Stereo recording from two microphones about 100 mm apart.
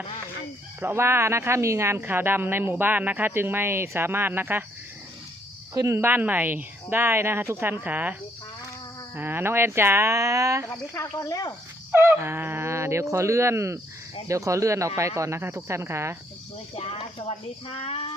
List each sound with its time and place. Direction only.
0.8 s speech: 25° right (ahead or behind)
5.7 s speech: 30° right (ahead or behind)
9.1 s speech: 20° right (ahead or behind)
10.9 s speech: 30° left (ahead or behind)
11.9 s speech: 20° right (ahead or behind)
16.7 s speech: 70° left (ahead or behind)